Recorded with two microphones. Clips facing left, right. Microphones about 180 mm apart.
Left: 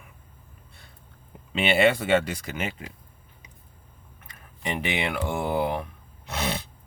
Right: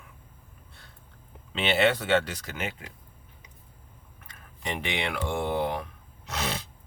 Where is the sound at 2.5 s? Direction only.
25° left (ahead or behind).